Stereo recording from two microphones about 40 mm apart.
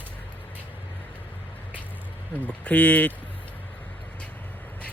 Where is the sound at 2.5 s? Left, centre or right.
Left.